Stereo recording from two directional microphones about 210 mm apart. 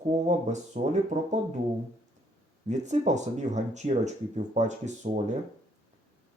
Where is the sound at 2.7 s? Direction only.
35° right (ahead or behind).